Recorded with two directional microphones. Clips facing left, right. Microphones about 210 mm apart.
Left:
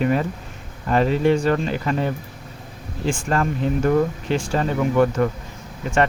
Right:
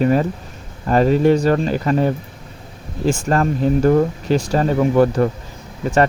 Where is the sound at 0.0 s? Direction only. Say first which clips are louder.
Right 4 dB; 40° right (ahead or behind).